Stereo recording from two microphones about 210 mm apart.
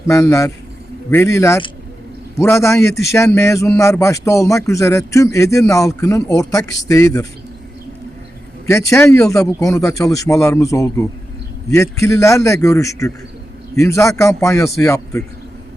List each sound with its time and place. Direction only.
0.1 s a man's voice: 15° left (ahead or behind)
8.7 s a man's voice: 15° left (ahead or behind)